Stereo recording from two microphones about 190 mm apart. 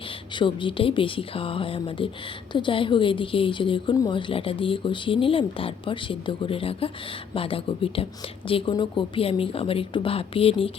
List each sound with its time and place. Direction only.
0.3 s a woman's voice: 25° left (ahead or behind)